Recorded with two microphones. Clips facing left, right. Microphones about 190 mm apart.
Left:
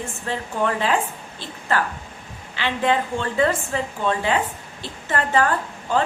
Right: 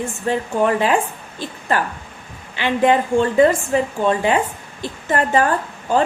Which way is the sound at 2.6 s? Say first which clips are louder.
Right 5 dB; 15° right (ahead or behind).